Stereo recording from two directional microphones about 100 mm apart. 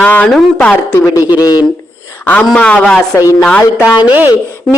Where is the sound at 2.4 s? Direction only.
10° left (ahead or behind).